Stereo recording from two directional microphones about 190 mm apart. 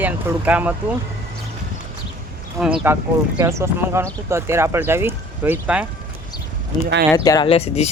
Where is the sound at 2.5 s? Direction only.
5° right (ahead or behind).